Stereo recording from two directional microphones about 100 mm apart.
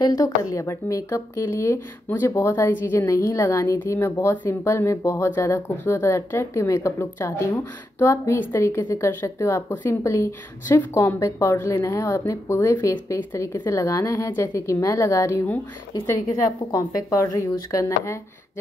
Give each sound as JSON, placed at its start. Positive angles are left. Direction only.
{"t": 0.0, "sound": "a woman's voice", "side_deg": 40}